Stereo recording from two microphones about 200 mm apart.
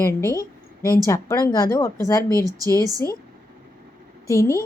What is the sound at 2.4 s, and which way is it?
Speech, 20° right (ahead or behind).